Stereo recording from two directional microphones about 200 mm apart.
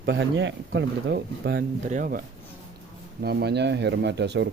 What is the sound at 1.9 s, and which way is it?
Speech, 45° right (ahead or behind).